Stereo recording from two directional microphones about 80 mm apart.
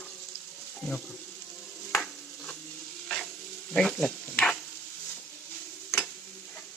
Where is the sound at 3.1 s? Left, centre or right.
Centre.